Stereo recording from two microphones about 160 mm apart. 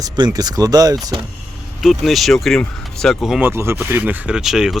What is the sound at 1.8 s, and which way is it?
Speech, centre (ahead or behind).